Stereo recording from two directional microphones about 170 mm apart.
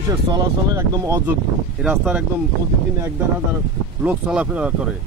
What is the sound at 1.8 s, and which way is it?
Speech, 5° right (ahead or behind).